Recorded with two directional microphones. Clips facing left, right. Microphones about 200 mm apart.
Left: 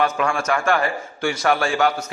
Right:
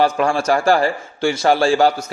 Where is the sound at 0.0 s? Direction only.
30° right (ahead or behind).